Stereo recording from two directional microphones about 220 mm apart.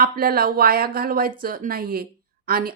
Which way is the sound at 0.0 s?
40° right (ahead or behind).